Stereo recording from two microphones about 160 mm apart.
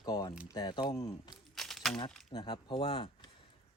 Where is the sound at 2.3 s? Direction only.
30° left (ahead or behind).